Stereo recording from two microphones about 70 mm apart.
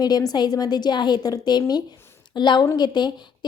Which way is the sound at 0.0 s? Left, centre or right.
Left.